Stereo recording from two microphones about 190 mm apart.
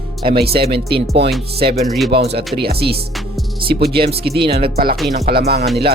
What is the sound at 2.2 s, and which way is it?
Speech, 55° right (ahead or behind).